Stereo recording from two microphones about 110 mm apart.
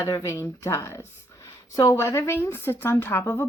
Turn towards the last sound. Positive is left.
turn(degrees=20)  # may be behind; listen again after turning